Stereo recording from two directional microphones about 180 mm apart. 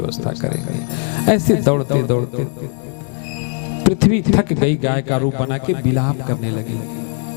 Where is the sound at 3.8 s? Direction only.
5° right (ahead or behind).